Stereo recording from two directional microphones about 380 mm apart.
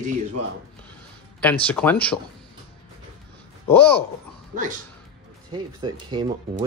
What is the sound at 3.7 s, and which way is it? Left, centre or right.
Speech, centre.